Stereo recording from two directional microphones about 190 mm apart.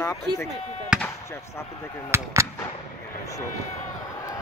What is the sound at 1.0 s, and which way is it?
Basketball bounce, 15° left (ahead or behind).